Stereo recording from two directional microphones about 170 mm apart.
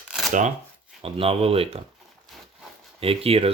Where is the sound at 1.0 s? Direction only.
35° right (ahead or behind).